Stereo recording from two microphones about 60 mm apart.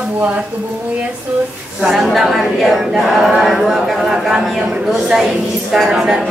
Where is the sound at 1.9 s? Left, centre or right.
Centre.